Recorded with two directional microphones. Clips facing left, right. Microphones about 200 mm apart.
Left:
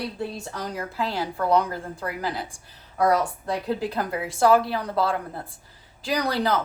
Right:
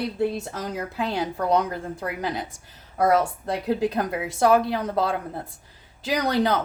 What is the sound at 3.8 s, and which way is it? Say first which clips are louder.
Speech: right 3 dB; 20° right (ahead or behind).